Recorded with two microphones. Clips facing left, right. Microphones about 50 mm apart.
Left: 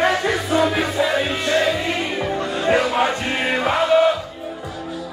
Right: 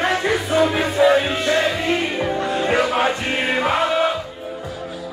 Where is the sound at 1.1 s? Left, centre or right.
Centre.